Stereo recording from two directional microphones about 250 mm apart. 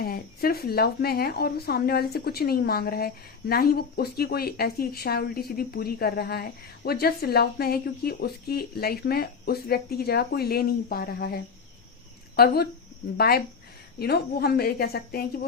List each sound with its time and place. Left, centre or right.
0.0 s a woman's voice: left
12.4 s a woman's voice: left